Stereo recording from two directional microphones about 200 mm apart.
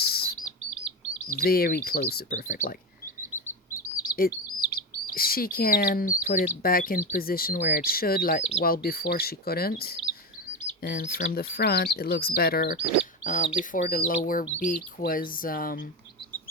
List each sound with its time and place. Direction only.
0.0 s chirp: 50° left (ahead or behind)
1.4 s speech: 50° left (ahead or behind)
3.8 s chirp: 45° left (ahead or behind)
6.6 s speech: 45° left (ahead or behind)
13.2 s speech: 35° left (ahead or behind)